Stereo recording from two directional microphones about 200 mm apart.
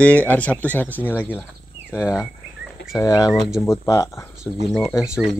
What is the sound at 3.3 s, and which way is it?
Speech, centre (ahead or behind).